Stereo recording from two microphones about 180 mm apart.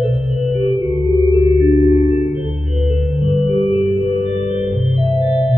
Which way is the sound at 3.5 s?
35° left (ahead or behind).